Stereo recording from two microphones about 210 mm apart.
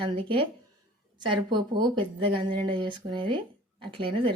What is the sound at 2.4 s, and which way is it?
Speech, 20° right (ahead or behind).